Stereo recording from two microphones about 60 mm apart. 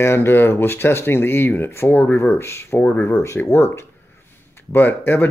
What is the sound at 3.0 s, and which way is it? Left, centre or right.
Speech, left.